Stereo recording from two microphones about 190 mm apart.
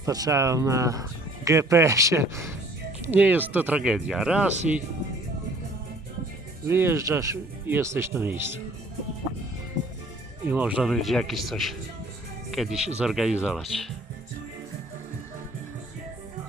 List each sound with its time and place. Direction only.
0.0 s speech: 20° right (ahead or behind)
6.7 s speech: 10° right (ahead or behind)
10.5 s speech: 5° right (ahead or behind)